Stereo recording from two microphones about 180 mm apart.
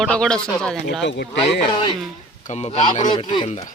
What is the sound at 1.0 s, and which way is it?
Speech, 75° left (ahead or behind).